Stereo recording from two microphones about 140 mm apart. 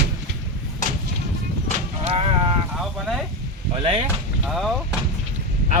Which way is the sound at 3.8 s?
45° right (ahead or behind).